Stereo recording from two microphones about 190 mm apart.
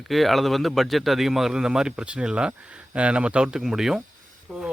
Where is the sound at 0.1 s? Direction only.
Centre (ahead or behind).